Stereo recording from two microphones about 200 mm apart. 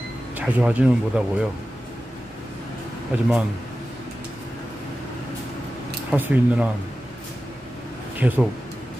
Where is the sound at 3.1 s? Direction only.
5° right (ahead or behind).